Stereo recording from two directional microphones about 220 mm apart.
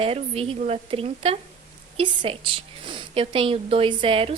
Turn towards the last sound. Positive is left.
turn(degrees=-25)  # may be behind; listen again after turning